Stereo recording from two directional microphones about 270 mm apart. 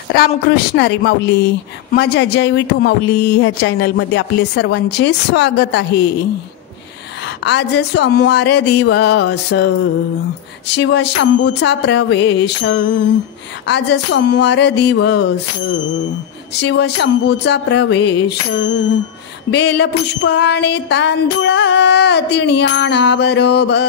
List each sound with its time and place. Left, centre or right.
0.1 s speech: left
7.4 s speech: left
10.7 s speech: left
16.5 s speech: left